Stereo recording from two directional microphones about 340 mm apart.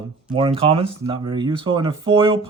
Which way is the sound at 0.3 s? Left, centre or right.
Centre.